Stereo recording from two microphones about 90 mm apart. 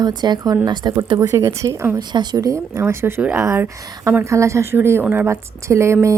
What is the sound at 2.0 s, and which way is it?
A woman's voice, 55° right (ahead or behind).